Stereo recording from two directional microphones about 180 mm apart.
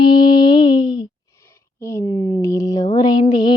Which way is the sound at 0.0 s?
25° left (ahead or behind).